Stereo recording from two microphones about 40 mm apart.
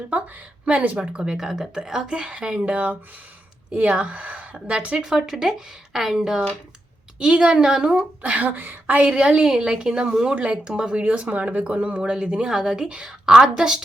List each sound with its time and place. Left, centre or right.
0.6 s speech: right
1.4 s speech: centre
2.0 s a woman's voice: right
4.9 s a woman's voice: centre
7.9 s speech: right
9.1 s a woman's voice: right
10.3 s speech: right
10.6 s a woman's voice: centre
10.9 s a woman's voice: right; by 13.8 s centre